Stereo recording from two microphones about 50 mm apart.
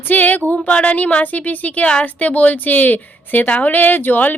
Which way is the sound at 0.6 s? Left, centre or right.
Left.